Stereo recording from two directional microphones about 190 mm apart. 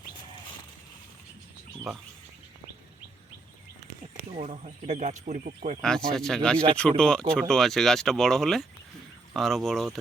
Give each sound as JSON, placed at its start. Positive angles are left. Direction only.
{"t": 4.3, "sound": "speech", "side_deg": -35}
{"t": 5.8, "sound": "speech", "side_deg": 5}